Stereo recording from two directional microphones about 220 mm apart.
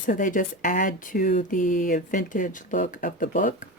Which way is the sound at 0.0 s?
35° left (ahead or behind).